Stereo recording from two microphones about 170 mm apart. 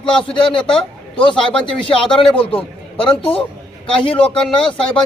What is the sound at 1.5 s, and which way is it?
Speech, 5° left (ahead or behind).